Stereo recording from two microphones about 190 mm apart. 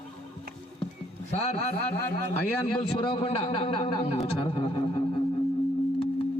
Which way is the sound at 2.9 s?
25° left (ahead or behind).